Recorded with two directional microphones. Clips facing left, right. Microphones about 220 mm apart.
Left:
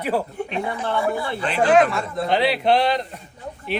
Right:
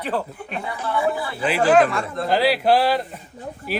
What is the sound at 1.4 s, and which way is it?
Speech, 5° right (ahead or behind).